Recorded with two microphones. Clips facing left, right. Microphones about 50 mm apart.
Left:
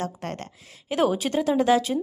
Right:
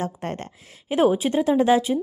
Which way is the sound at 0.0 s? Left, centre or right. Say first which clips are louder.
Right 2 dB; right.